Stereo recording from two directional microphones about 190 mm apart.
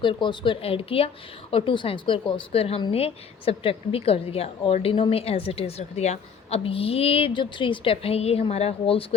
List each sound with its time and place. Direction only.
0.0 s speech: 25° left (ahead or behind)